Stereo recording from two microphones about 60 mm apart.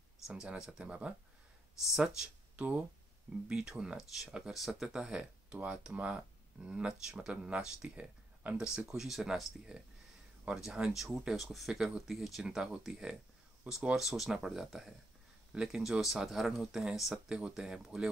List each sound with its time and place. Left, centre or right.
0.3 s speech: centre
1.9 s speech: centre
2.5 s speech: right
3.4 s speech: centre
4.3 s speech: centre
8.7 s speech: centre
13.9 s speech: centre
17.1 s speech: centre